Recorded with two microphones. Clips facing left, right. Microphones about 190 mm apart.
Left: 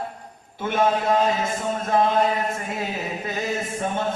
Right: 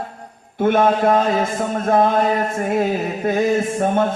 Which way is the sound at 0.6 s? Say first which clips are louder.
Right 6 dB; 55° right (ahead or behind).